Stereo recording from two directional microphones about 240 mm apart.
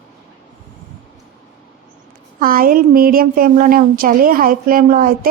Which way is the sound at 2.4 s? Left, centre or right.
Right.